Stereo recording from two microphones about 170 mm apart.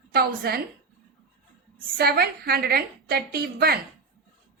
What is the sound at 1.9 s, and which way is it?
A woman's voice, 65° right (ahead or behind).